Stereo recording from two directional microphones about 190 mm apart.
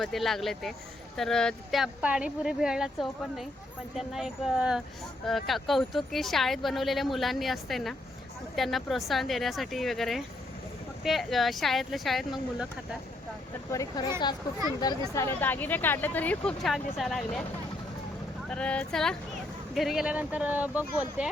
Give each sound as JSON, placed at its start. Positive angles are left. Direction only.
{"t": 0.0, "sound": "speech", "side_deg": 0}
{"t": 13.7, "sound": "speech", "side_deg": 15}
{"t": 18.4, "sound": "speech", "side_deg": 5}